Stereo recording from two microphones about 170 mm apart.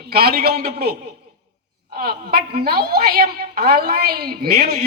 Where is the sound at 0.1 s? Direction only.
65° right (ahead or behind).